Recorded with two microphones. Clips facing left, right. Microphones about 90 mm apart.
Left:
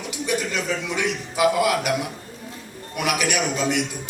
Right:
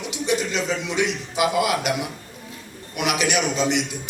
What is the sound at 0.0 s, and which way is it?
A man's voice, 20° right (ahead or behind).